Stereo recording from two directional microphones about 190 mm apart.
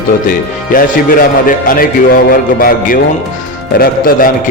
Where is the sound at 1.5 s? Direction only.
50° left (ahead or behind).